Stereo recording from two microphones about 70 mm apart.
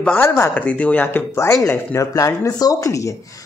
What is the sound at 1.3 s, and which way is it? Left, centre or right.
Speech, left.